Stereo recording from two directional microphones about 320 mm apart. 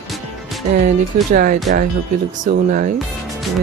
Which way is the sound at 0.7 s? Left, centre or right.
Right.